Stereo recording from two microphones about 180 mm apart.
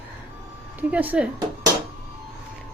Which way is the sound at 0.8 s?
10° right (ahead or behind).